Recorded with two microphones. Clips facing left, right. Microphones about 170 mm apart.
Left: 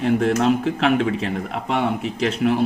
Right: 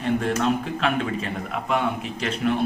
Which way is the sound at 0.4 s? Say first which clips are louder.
Left 5 dB; 80° left.